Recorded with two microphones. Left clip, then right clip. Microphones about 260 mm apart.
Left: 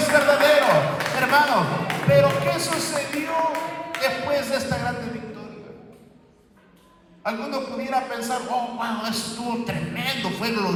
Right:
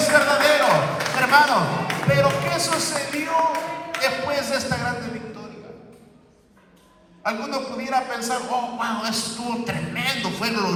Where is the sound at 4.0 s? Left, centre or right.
Right.